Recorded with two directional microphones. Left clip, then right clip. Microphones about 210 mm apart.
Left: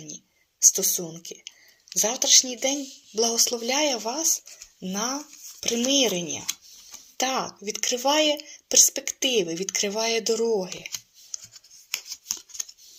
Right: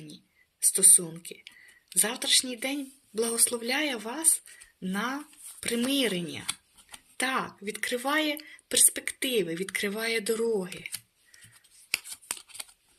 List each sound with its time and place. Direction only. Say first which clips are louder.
0.6 s speech: left 5 dB; 20° right (ahead or behind)